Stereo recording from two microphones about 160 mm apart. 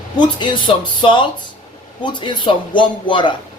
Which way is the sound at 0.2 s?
30° left (ahead or behind).